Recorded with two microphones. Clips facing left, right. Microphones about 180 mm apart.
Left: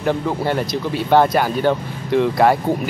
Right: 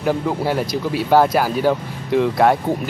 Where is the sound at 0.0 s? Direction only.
5° right (ahead or behind).